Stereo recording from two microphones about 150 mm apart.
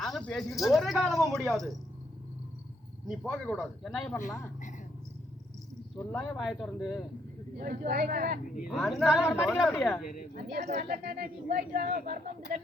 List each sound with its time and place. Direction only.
0.0 s speech: 5° left (ahead or behind)
3.1 s speech: centre (ahead or behind)
6.1 s speech: centre (ahead or behind)
7.6 s speech: 80° right
8.7 s speech: centre (ahead or behind)
10.7 s speech: 90° right; by 12.5 s 75° right (ahead or behind)